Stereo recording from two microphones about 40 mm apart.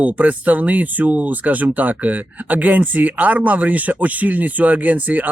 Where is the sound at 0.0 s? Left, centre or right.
Right.